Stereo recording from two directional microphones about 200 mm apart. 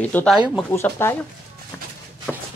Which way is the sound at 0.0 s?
5° left (ahead or behind).